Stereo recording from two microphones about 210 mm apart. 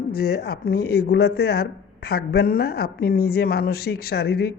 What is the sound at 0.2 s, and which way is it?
Speech, 50° left (ahead or behind).